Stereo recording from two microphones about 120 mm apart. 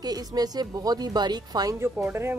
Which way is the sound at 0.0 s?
35° right (ahead or behind).